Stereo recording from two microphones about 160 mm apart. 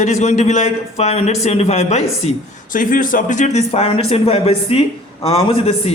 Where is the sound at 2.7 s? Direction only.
60° left (ahead or behind).